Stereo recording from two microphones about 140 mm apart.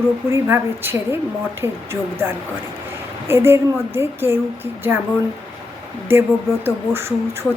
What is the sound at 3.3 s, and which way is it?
Speech, 15° right (ahead or behind).